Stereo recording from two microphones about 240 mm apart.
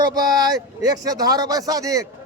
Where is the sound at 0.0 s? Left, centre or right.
Centre.